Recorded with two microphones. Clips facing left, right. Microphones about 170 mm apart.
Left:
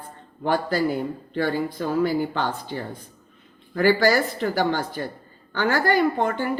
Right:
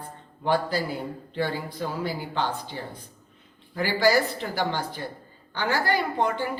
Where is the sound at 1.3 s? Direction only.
50° left (ahead or behind).